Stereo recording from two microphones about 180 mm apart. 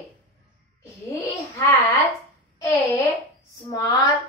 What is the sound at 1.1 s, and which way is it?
Speech, 15° left (ahead or behind).